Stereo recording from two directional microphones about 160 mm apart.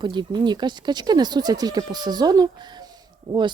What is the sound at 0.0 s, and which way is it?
Speech, 30° right (ahead or behind).